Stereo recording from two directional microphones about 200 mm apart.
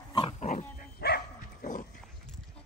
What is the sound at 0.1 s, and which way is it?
Pig, 30° left (ahead or behind).